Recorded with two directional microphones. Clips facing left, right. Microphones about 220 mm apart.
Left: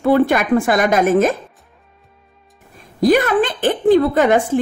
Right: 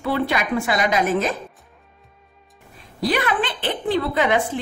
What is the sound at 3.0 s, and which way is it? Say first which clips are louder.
Speech: left 8 dB; 45° left (ahead or behind).